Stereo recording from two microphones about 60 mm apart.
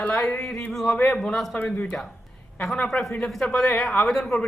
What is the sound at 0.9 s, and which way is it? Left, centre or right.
Speech, left.